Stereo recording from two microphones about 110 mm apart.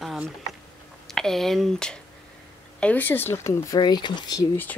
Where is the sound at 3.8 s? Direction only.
45° left (ahead or behind).